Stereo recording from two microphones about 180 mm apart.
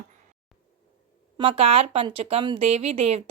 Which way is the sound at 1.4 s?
30° right (ahead or behind).